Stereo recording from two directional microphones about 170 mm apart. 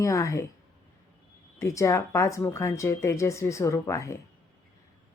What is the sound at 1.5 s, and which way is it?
Speech, 15° left (ahead or behind).